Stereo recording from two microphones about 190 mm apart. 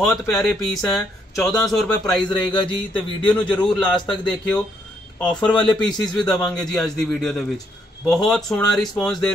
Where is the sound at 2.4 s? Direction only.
25° left (ahead or behind).